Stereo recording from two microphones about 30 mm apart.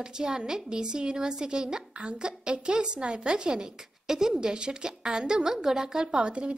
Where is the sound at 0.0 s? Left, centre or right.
Right.